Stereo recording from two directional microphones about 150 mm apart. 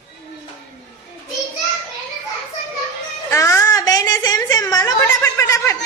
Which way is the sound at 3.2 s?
20° left (ahead or behind).